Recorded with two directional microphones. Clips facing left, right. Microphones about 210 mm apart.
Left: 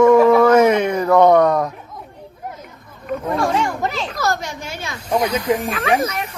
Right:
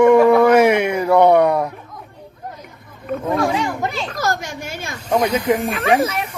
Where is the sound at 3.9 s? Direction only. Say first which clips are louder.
Even; centre (ahead or behind).